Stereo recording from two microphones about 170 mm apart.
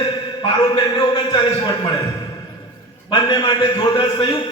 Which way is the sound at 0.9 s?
25° left (ahead or behind).